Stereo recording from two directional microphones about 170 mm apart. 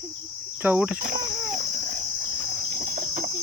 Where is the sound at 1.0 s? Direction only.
55° right (ahead or behind).